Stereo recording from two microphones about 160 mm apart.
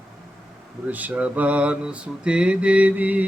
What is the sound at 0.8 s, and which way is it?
Mantra, 10° right (ahead or behind).